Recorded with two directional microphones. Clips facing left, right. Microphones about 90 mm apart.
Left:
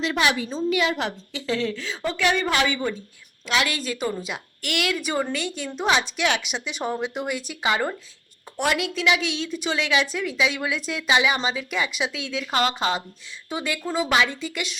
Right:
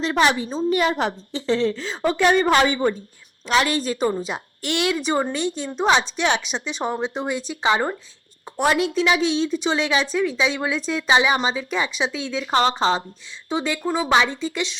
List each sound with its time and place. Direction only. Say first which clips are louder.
0.0 s a woman's voice: right 4 dB; 35° right (ahead or behind)